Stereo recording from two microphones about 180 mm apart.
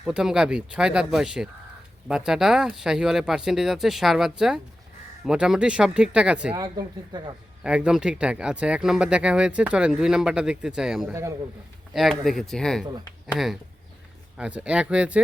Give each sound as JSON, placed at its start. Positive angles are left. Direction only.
{"t": 0.0, "sound": "speech", "side_deg": -5}
{"t": 6.5, "sound": "speech", "side_deg": -20}
{"t": 7.6, "sound": "speech", "side_deg": -5}
{"t": 11.1, "sound": "a man's voice", "side_deg": -15}
{"t": 11.9, "sound": "speech", "side_deg": 0}